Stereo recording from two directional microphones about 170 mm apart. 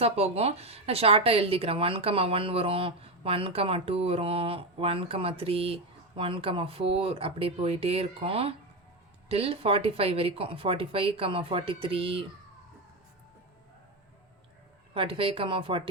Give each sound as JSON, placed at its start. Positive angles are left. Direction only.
{"t": 0.0, "sound": "speech", "side_deg": -35}
{"t": 14.9, "sound": "speech", "side_deg": -30}